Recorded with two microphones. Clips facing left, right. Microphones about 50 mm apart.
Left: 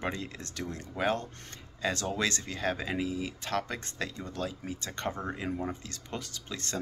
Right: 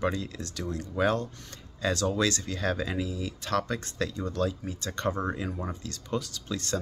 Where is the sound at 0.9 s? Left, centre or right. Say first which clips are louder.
Right 4 dB; centre.